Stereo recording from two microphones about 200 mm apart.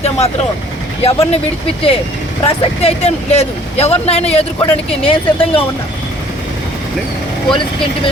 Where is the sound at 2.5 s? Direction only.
30° left (ahead or behind).